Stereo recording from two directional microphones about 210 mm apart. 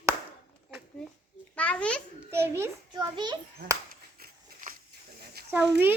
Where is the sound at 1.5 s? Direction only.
5° left (ahead or behind).